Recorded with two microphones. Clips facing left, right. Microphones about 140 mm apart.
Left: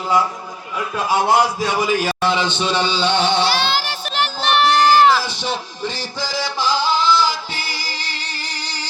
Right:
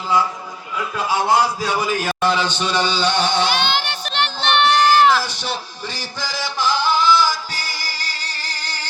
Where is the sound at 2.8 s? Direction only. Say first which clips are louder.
Even; 10° right (ahead or behind).